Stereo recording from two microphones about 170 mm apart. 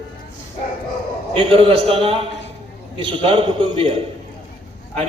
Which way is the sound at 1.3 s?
35° right (ahead or behind).